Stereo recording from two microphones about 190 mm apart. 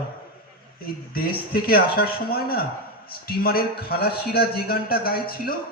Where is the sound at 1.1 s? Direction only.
50° left (ahead or behind).